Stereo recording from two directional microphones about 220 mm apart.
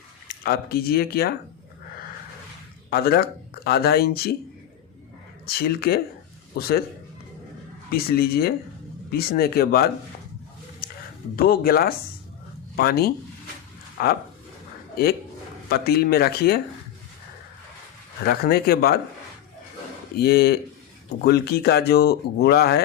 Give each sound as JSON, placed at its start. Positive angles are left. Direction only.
{"t": 0.4, "sound": "speech", "side_deg": 45}
{"t": 2.9, "sound": "speech", "side_deg": 45}
{"t": 5.5, "sound": "speech", "side_deg": 45}
{"t": 7.9, "sound": "speech", "side_deg": 45}
{"t": 10.8, "sound": "a sound", "side_deg": 40}
{"t": 11.3, "sound": "speech", "side_deg": 45}
{"t": 15.7, "sound": "speech", "side_deg": 45}
{"t": 18.3, "sound": "speech", "side_deg": 45}
{"t": 20.1, "sound": "speech", "side_deg": 45}